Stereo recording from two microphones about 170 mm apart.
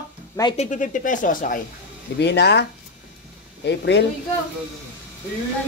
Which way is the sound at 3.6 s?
90° left.